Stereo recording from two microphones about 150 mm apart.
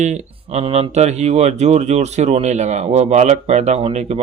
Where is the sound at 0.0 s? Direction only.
50° right (ahead or behind).